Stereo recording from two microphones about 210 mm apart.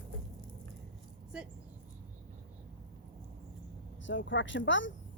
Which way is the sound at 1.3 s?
5° right (ahead or behind).